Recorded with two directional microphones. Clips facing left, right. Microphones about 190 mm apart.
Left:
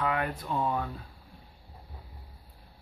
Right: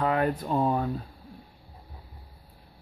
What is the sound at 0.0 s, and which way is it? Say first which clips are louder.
Speech: right 5 dB; 35° right (ahead or behind).